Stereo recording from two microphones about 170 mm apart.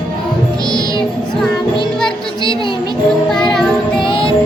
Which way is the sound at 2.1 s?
30° left (ahead or behind).